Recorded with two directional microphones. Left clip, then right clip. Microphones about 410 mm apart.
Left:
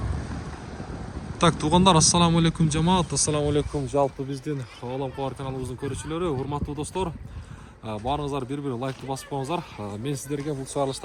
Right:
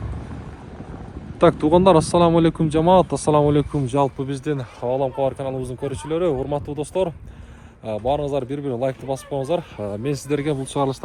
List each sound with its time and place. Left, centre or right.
1.4 s a man's voice: centre
3.8 s speech: right
4.9 s a man's voice: centre
10.5 s speech: centre